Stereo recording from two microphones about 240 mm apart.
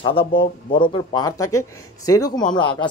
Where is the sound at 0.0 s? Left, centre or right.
Left.